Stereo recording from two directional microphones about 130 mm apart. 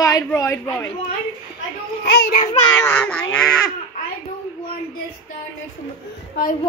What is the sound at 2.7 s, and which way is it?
A child's voice, 15° left (ahead or behind).